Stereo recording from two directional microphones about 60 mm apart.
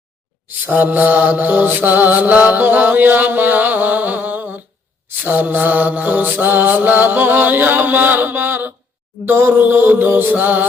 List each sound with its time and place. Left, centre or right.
0.7 s mantra: right